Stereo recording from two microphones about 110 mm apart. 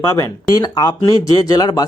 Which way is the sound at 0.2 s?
35° left (ahead or behind).